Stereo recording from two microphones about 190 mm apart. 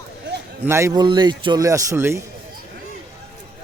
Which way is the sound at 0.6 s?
15° right (ahead or behind).